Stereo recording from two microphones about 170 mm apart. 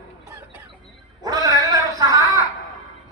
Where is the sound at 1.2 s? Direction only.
20° right (ahead or behind).